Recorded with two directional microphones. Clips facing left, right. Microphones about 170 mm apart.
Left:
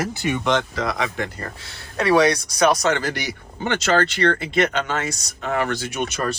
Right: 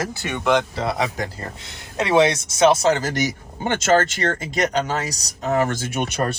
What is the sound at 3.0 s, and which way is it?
Speech, 45° right (ahead or behind).